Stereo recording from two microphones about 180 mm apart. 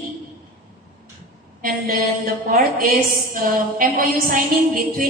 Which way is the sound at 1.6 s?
50° right (ahead or behind).